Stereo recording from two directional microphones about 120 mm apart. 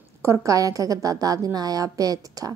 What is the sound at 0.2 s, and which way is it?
A woman's voice, 25° right (ahead or behind).